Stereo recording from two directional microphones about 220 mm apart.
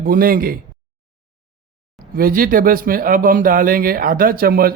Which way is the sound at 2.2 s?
40° right (ahead or behind).